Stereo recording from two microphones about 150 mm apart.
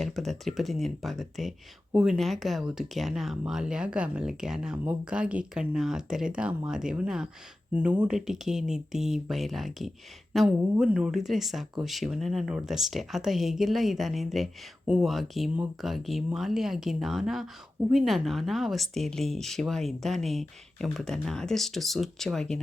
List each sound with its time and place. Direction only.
0.0 s speech: centre (ahead or behind)